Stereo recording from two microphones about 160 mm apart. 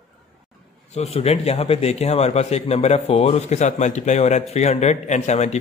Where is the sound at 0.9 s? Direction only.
40° left (ahead or behind).